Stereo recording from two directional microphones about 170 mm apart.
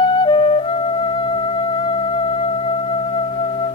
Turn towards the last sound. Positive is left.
turn(degrees=30)  # may be behind; listen again after turning